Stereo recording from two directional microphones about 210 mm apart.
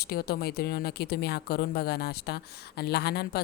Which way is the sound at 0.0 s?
45° left (ahead or behind).